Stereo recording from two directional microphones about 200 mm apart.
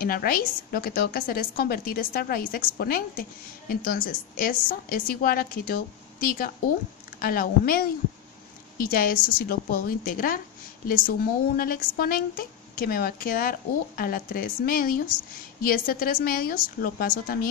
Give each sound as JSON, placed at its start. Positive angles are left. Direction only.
{"t": 0.0, "sound": "a woman's voice", "side_deg": 45}